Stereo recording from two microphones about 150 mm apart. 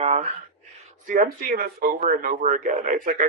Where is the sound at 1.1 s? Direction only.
65° right (ahead or behind).